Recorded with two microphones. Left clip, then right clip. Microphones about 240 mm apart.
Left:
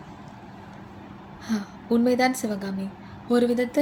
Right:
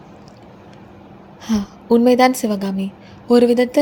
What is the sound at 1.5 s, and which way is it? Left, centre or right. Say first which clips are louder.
A woman's voice: right 10 dB; right.